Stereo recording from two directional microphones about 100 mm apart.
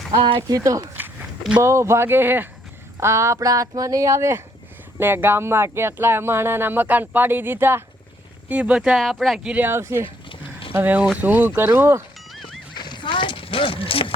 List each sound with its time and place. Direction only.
0.1 s speech: 55° right (ahead or behind)
0.4 s speech: 35° right (ahead or behind)
8.4 s speech: 15° right (ahead or behind)
9.0 s speech: centre (ahead or behind)
9.5 s speech: 20° right (ahead or behind)
12.3 s music: centre (ahead or behind)
12.7 s a sound: 50° left (ahead or behind); by 14.1 s 65° left (ahead or behind)